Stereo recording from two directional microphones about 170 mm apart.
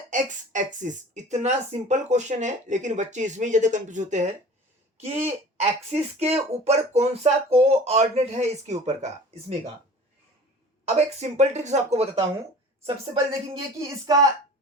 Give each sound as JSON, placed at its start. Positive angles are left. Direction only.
{"t": 0.1, "sound": "speech", "side_deg": -45}
{"t": 10.8, "sound": "speech", "side_deg": -40}
{"t": 13.6, "sound": "speech", "side_deg": -20}